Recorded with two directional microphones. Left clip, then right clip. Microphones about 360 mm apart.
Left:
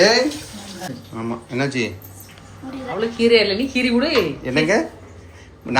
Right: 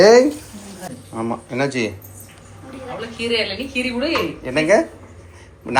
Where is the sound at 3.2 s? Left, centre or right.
Left.